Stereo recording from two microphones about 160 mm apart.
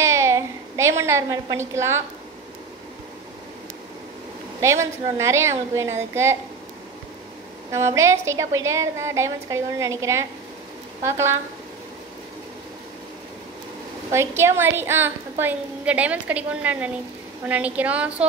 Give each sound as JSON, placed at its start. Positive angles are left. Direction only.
{"t": 0.0, "sound": "a sound", "side_deg": -15}
{"t": 4.6, "sound": "a woman's voice", "side_deg": -20}
{"t": 7.7, "sound": "a woman's voice", "side_deg": -20}
{"t": 14.1, "sound": "a woman's voice", "side_deg": -15}